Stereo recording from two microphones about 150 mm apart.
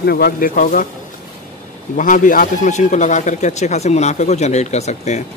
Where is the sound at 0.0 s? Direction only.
90° left; by 0.8 s 65° left (ahead or behind).